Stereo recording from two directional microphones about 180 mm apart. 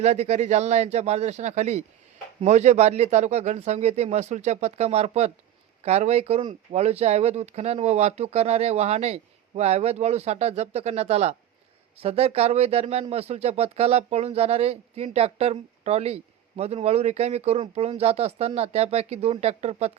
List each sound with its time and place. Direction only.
0.0 s speech: 40° right (ahead or behind)